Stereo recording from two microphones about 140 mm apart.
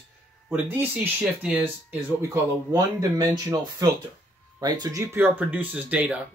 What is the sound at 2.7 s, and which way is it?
Speech, 25° right (ahead or behind).